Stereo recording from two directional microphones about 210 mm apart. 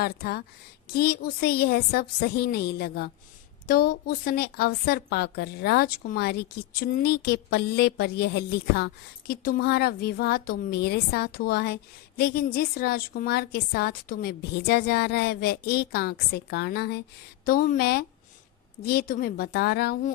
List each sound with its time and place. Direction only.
0.0 s a woman's voice: 50° left (ahead or behind)